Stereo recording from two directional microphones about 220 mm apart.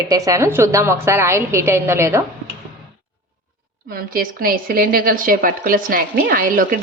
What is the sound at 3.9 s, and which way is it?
A woman's voice, 40° right (ahead or behind).